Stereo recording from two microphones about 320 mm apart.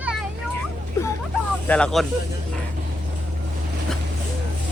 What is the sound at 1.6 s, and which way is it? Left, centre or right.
Speech, centre.